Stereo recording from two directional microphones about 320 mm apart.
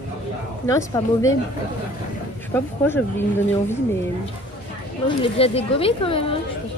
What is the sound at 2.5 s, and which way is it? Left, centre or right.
Speech, centre.